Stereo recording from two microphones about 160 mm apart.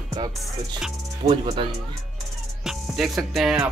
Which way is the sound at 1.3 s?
35° right (ahead or behind).